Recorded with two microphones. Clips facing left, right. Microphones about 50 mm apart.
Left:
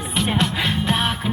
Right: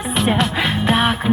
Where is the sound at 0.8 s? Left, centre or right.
Centre.